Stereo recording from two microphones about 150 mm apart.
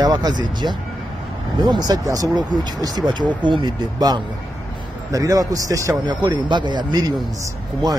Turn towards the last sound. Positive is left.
turn(degrees=-25)  # may be behind; listen again after turning